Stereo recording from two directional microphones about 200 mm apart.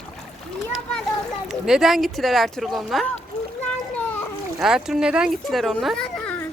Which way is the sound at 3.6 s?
5° left (ahead or behind).